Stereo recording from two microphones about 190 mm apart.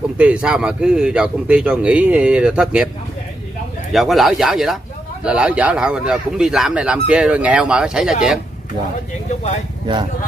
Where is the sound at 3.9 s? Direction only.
Centre (ahead or behind).